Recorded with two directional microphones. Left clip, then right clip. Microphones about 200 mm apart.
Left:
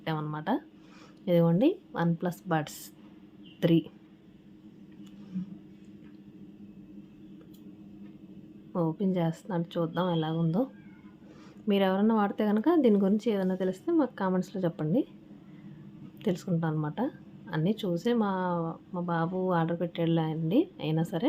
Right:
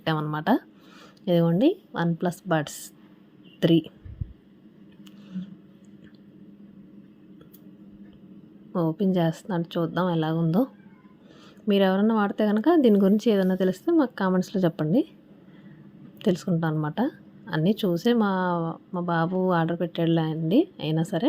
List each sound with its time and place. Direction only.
0.0 s a woman's voice: 30° right (ahead or behind)
8.7 s a woman's voice: 20° right (ahead or behind)
11.7 s a woman's voice: 20° right (ahead or behind)
16.1 s a woman's voice: 25° right (ahead or behind)